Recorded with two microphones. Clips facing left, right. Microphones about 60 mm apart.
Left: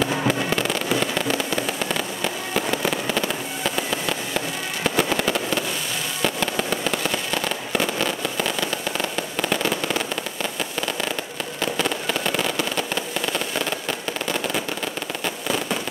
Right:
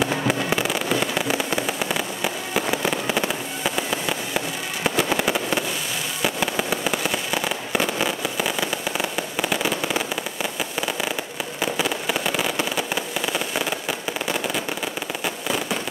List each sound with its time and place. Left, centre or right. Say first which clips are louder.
0.0 s fireworks: even; centre
3.1 s fireworks: even; right; by 15.8 s centre